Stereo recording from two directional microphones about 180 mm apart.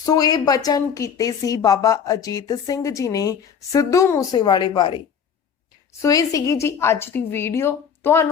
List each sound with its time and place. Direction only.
0.0 s a woman's voice: 20° left (ahead or behind)
6.0 s a woman's voice: 20° left (ahead or behind)